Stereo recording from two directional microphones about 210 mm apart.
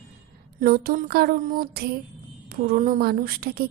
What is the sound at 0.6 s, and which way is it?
A woman's voice, 45° right (ahead or behind).